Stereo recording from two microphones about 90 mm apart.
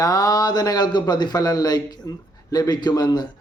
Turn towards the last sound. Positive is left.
turn(degrees=50)  # may be behind; listen again after turning